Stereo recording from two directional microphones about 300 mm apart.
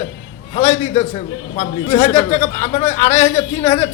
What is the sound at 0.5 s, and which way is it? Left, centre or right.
A man's voice, left.